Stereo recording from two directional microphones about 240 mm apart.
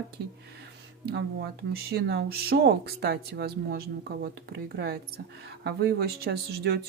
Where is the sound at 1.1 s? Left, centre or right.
Right.